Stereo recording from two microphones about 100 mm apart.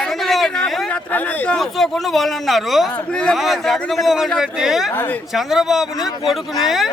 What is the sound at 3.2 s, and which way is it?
Speech, centre (ahead or behind).